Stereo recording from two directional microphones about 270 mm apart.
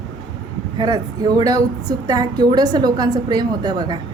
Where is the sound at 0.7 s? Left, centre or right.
Centre.